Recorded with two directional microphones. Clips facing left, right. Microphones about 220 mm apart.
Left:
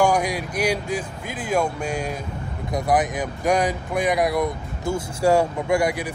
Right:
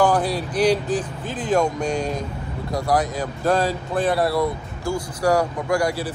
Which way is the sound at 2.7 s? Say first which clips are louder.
Even; 20° left (ahead or behind).